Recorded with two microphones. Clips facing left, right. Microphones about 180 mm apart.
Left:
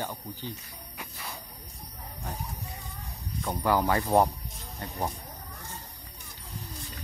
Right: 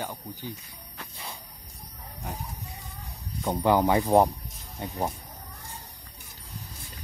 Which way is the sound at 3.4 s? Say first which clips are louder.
Right 4 dB; 20° right (ahead or behind).